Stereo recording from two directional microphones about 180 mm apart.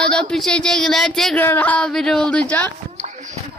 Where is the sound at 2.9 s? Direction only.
40° right (ahead or behind).